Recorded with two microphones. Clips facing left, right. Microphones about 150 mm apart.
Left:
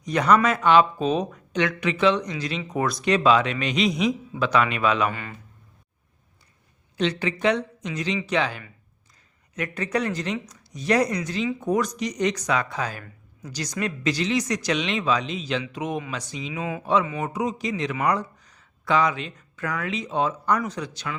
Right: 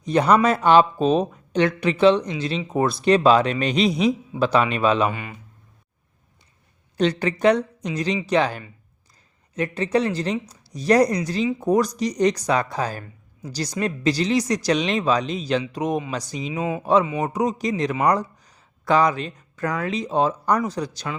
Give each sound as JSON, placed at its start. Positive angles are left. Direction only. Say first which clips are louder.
{"t": 0.0, "sound": "speech", "louder": "right 2 dB", "side_deg": -30}
{"t": 5.1, "sound": "speech", "louder": "right 2 dB", "side_deg": -15}
{"t": 6.9, "sound": "speech", "louder": "right 4 dB", "side_deg": -40}
{"t": 9.6, "sound": "speech", "louder": "right 5 dB", "side_deg": -30}